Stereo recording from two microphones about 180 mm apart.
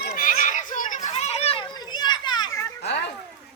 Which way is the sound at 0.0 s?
50° left (ahead or behind).